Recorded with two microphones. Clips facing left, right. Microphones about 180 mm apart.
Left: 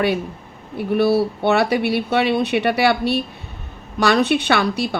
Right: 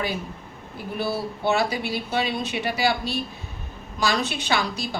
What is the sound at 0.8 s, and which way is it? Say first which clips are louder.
Speech: left 11 dB; 65° left (ahead or behind).